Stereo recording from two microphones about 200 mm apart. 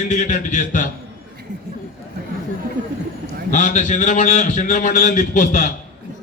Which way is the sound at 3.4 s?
40° left (ahead or behind).